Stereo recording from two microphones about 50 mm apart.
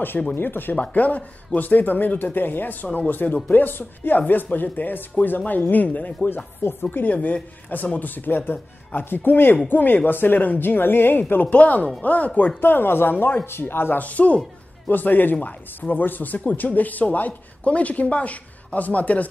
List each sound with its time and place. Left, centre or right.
0.3 s speech: left
0.7 s speech: left
7.1 s a man's voice: left
11.5 s a man's voice: left
14.0 s a man's voice: left